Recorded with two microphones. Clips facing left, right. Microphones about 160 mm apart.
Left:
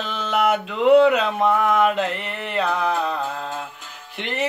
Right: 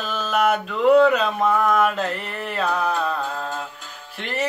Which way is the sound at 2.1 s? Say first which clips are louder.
Even; 75° left (ahead or behind).